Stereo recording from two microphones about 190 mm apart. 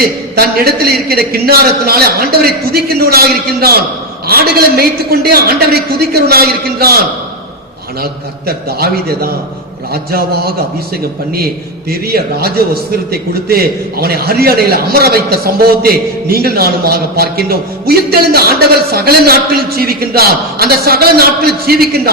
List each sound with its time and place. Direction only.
0.0 s a man's voice: 55° right (ahead or behind)
8.0 s a man's voice: 55° right (ahead or behind)